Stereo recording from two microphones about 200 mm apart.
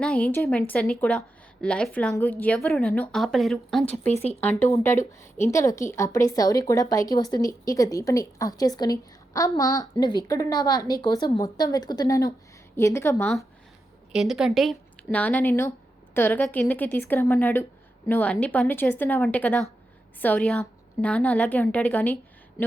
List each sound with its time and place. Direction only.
0.0 s speech: 5° left (ahead or behind)
4.1 s speech: 30° left (ahead or behind)
4.7 s a woman's voice: 15° left (ahead or behind)
14.1 s a woman's voice: centre (ahead or behind)